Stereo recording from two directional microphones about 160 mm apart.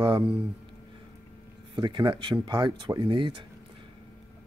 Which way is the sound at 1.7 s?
30° right (ahead or behind).